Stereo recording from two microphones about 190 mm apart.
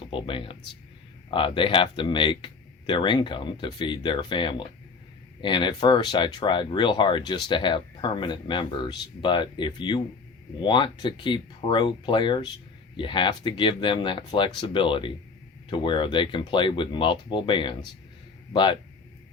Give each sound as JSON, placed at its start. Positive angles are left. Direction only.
{"t": 0.0, "sound": "speech", "side_deg": 25}